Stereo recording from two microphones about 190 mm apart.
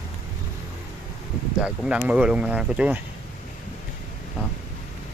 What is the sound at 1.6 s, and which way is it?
Speech, 5° right (ahead or behind).